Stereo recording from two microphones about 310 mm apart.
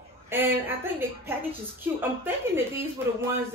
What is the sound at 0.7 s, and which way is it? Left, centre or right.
A woman's voice, centre.